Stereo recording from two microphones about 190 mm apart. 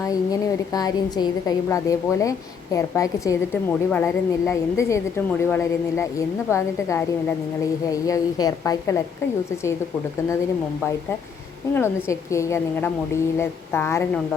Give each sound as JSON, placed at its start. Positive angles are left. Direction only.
{"t": 0.0, "sound": "a woman's voice", "side_deg": 20}
{"t": 11.7, "sound": "a woman's voice", "side_deg": 10}